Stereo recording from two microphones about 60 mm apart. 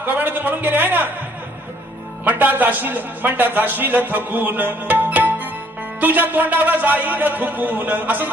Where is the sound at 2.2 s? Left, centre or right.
Right.